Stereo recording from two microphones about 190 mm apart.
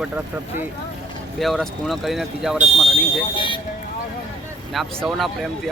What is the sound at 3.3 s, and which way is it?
Speech, 25° left (ahead or behind).